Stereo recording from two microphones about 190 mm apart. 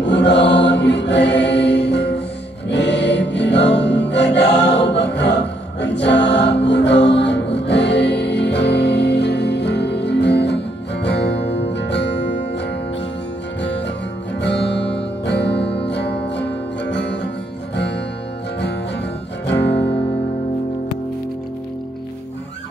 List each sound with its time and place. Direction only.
0.0 s choir: 65° left (ahead or behind)
2.7 s music: 65° left (ahead or behind)
4.6 s choir: 65° left (ahead or behind)
11.7 s music: 65° left (ahead or behind)
13.6 s music: 65° left (ahead or behind)
19.4 s music: 65° left (ahead or behind)